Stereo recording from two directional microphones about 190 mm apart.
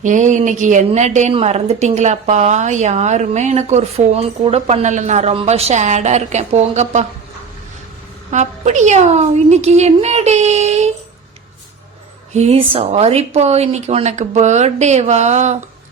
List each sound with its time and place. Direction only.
0.0 s a woman's voice: 40° right (ahead or behind)
8.3 s a woman's voice: 40° right (ahead or behind)
12.3 s a woman's voice: 35° right (ahead or behind)